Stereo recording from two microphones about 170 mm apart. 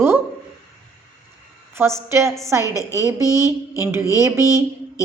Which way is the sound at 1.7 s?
15° right (ahead or behind).